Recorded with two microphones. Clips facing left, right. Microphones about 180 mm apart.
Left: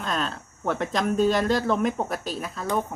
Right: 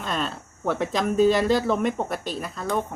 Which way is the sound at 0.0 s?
Centre (ahead or behind).